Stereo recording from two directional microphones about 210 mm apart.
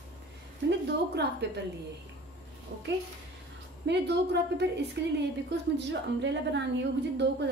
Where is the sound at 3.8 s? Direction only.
55° right (ahead or behind).